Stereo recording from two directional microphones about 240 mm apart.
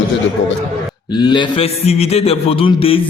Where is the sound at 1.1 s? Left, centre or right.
Centre.